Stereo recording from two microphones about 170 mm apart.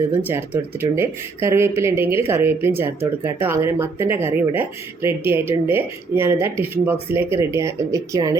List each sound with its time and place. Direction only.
0.2 s speech: 10° right (ahead or behind)